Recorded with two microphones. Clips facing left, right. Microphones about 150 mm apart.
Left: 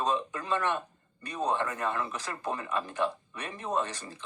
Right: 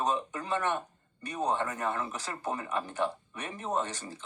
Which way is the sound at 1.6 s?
30° right (ahead or behind).